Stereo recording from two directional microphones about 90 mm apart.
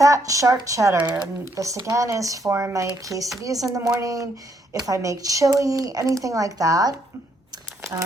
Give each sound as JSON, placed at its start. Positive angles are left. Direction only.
{"t": 0.0, "sound": "speech", "side_deg": -40}
{"t": 0.9, "sound": "speech", "side_deg": -20}
{"t": 1.5, "sound": "speech", "side_deg": -35}
{"t": 7.8, "sound": "crumpling", "side_deg": -30}